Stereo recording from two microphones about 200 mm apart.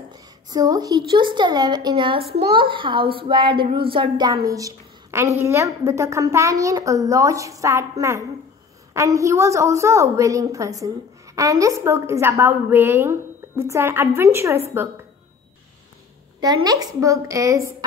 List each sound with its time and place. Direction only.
0.5 s a child's voice: 20° right (ahead or behind)
16.6 s a woman's voice: 15° right (ahead or behind)